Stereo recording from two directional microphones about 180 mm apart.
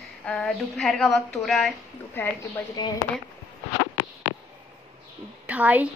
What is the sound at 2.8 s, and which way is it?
Speech, 25° left (ahead or behind).